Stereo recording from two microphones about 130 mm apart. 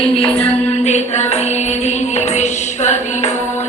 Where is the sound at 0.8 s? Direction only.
60° left (ahead or behind).